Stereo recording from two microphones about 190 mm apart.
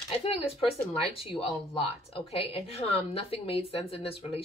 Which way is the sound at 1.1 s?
30° left (ahead or behind).